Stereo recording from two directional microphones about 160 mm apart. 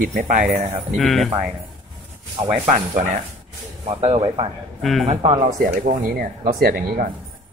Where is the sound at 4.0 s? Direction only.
35° right (ahead or behind).